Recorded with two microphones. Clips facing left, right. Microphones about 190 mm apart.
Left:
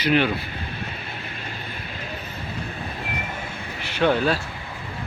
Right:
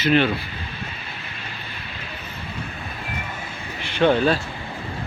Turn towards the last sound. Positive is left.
turn(degrees=5)  # may be behind; listen again after turning